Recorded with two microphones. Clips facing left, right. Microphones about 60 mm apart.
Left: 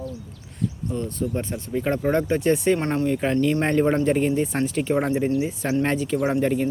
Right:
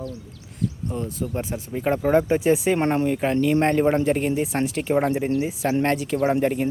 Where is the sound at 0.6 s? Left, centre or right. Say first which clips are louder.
Even; centre.